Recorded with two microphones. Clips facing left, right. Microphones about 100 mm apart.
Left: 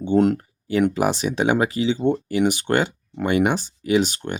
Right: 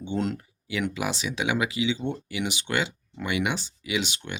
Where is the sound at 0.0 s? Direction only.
45° left (ahead or behind).